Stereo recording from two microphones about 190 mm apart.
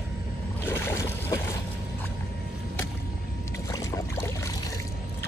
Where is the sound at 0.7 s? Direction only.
10° left (ahead or behind).